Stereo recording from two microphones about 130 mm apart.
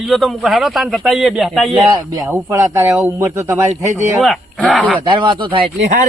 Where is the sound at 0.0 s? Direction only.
Centre (ahead or behind).